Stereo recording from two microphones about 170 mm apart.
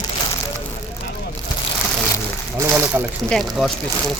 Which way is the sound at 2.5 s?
15° right (ahead or behind).